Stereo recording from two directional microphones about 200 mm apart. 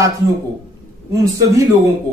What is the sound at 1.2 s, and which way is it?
Speech, 15° right (ahead or behind).